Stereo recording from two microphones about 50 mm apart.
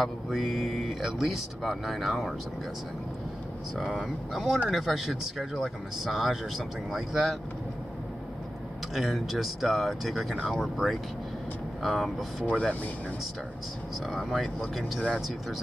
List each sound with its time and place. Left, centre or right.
0.0 s speech: centre
3.7 s speech: centre
8.9 s speech: centre
12.4 s speech: centre
14.1 s speech: centre